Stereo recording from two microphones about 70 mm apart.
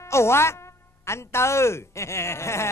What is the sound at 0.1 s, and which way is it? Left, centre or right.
Speech, left.